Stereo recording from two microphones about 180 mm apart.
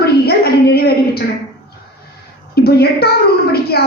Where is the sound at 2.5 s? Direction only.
60° left (ahead or behind).